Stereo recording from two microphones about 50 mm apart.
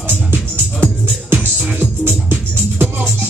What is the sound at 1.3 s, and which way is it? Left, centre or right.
Music, right.